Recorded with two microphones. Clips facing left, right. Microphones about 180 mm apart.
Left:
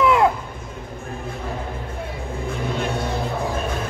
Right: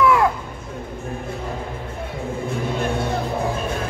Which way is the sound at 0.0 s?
20° left (ahead or behind).